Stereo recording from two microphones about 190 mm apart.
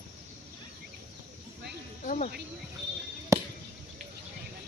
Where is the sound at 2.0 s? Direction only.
40° left (ahead or behind).